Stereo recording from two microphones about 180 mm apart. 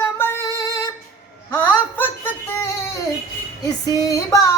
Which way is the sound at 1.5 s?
10° left (ahead or behind).